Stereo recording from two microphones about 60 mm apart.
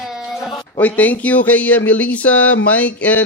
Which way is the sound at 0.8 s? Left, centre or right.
Left.